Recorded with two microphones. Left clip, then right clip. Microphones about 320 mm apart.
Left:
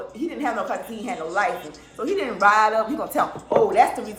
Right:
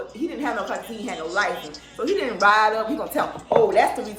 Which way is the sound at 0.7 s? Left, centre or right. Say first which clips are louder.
Left 1 dB; centre.